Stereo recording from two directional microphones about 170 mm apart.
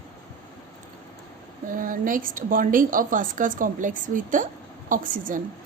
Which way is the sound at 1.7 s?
50° right (ahead or behind).